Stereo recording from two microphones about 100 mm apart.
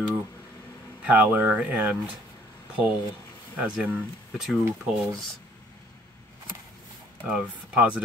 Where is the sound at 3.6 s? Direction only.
15° right (ahead or behind).